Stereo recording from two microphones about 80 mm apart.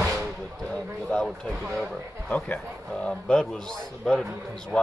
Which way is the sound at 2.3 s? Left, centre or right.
Centre.